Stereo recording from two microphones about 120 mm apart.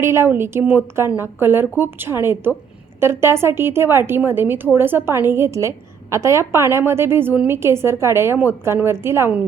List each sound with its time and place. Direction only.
0.0 s speech: 20° right (ahead or behind)